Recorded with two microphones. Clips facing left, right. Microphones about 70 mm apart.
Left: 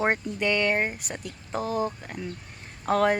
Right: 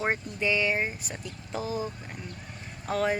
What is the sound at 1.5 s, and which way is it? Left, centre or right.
Speech, left.